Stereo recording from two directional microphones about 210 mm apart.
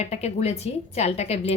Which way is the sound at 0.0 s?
30° left (ahead or behind).